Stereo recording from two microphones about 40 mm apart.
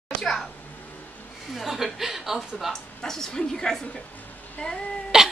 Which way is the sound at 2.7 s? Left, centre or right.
Centre.